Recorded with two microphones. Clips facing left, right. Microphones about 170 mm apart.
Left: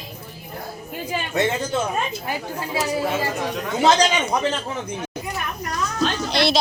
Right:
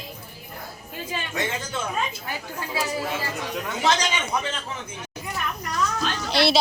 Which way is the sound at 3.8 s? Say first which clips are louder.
Left 7 dB; 35° left (ahead or behind).